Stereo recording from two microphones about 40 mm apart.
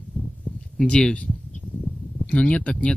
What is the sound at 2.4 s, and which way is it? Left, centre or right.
Speech, left.